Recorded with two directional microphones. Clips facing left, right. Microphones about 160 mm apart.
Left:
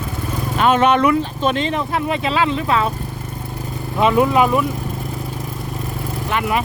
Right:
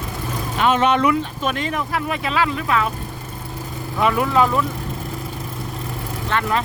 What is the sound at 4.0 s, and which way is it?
Speech, 20° left (ahead or behind).